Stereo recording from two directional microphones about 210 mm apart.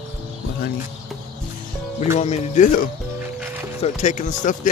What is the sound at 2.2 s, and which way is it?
Speech, 30° left (ahead or behind).